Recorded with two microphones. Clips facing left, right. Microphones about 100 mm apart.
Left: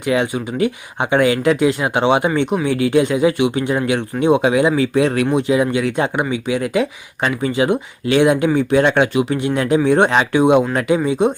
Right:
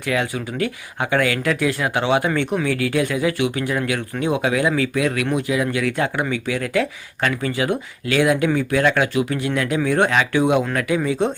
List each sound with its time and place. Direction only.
0.0 s speech: 20° left (ahead or behind)